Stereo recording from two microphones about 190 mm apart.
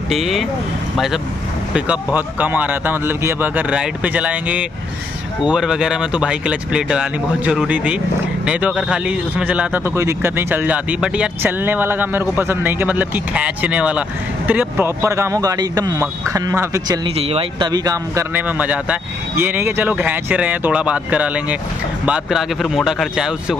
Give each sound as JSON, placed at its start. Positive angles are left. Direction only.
{"t": 0.1, "sound": "a man's voice", "side_deg": 0}